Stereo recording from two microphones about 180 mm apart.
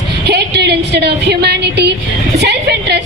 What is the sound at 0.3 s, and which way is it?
A woman's voice, 65° right (ahead or behind).